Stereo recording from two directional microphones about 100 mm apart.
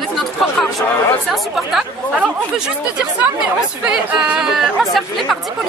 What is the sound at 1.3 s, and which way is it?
Speech, 5° right (ahead or behind).